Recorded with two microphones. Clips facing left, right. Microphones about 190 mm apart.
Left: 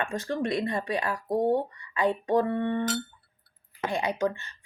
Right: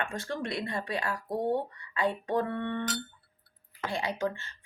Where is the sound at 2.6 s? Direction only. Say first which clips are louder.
Left 5 dB; 40° left (ahead or behind).